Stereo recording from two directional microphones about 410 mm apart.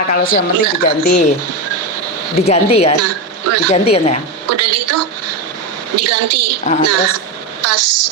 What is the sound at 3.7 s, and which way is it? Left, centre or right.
Speech, centre.